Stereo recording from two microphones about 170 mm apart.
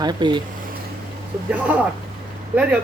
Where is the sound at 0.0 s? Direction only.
25° right (ahead or behind).